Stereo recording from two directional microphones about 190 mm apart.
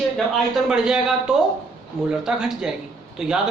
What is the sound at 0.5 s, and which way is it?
Speech, 5° right (ahead or behind).